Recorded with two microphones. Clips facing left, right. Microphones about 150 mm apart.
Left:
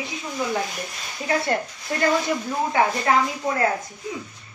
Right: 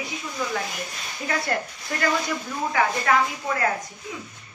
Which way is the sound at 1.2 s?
25° left (ahead or behind).